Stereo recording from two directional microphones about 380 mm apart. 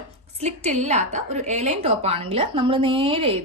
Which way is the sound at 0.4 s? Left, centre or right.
Centre.